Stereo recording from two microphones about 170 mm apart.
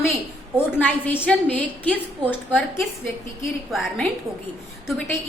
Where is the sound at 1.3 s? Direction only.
5° left (ahead or behind).